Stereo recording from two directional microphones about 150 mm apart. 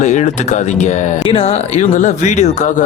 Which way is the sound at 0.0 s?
55° left (ahead or behind).